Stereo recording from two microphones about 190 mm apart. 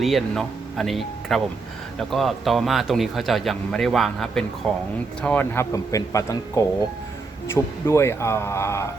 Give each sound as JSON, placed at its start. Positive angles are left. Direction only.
{"t": 0.0, "sound": "speech", "side_deg": 0}